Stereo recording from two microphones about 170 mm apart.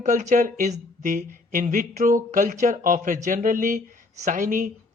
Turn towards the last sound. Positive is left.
turn(degrees=-50)  # may be behind; listen again after turning